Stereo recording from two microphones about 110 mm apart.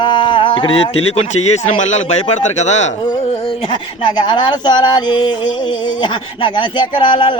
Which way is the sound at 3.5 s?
40° left (ahead or behind).